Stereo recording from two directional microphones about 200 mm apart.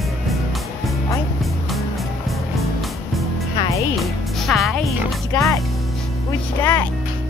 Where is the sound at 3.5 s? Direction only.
25° left (ahead or behind).